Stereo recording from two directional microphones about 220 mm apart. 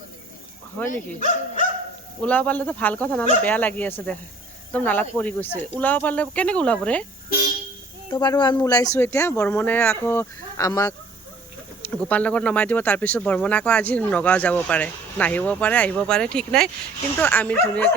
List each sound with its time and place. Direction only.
0.8 s speech: 10° left (ahead or behind)
2.2 s speech: 5° left (ahead or behind)
8.1 s speech: 20° left (ahead or behind)